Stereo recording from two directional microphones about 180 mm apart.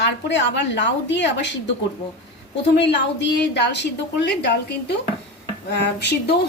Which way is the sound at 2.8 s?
70° left (ahead or behind).